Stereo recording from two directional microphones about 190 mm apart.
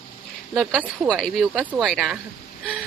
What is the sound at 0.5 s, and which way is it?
Speech, 5° right (ahead or behind).